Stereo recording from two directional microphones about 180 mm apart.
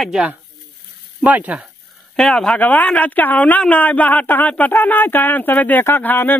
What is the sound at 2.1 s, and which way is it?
Speech, 5° left (ahead or behind).